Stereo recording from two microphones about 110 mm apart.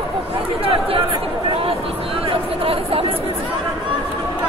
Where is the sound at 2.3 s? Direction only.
60° right (ahead or behind).